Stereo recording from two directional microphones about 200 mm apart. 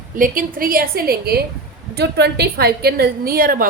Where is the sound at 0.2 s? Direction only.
45° right (ahead or behind).